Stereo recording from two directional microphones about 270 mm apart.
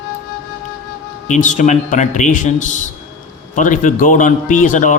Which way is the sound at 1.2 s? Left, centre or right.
Left.